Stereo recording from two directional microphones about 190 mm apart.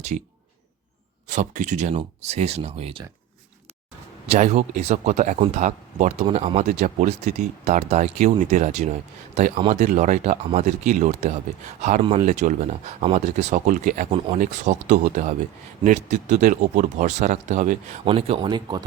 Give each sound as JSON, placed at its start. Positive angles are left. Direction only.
{"t": 1.3, "sound": "speech", "side_deg": -40}
{"t": 4.3, "sound": "speech", "side_deg": -35}